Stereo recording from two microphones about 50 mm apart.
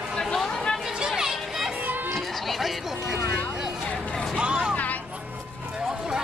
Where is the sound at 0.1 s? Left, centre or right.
Centre.